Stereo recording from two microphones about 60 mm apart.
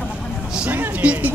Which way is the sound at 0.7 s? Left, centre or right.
Right.